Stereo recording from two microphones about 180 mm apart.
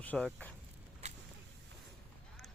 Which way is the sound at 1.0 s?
40° right (ahead or behind).